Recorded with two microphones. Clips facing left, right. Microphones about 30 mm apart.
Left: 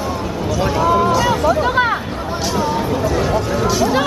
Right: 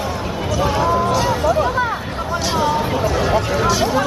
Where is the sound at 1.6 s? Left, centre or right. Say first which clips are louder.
Left 3 dB; left.